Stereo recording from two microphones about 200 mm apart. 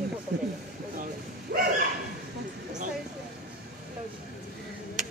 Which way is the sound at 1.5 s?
55° right (ahead or behind).